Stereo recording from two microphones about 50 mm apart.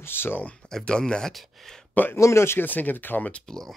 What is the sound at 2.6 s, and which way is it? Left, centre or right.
Speech, left.